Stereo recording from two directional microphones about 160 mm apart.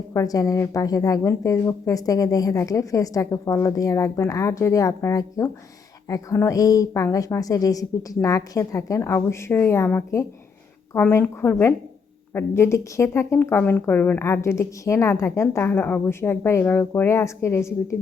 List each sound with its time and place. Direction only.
0.1 s a woman's voice: 20° left (ahead or behind)